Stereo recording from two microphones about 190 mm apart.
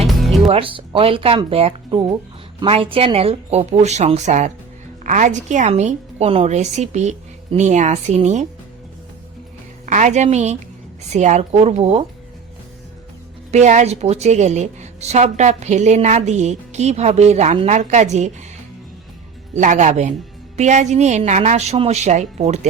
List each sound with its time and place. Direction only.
0.0 s music: centre (ahead or behind)
0.4 s a woman's voice: 30° right (ahead or behind)
9.8 s a woman's voice: 40° right (ahead or behind)
13.5 s a woman's voice: 40° right (ahead or behind)
19.5 s a woman's voice: 40° right (ahead or behind)